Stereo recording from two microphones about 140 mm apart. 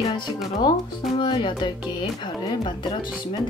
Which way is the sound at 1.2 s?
35° left (ahead or behind).